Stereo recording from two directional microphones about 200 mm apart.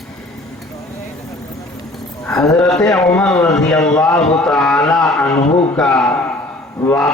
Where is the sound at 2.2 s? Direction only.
5° left (ahead or behind).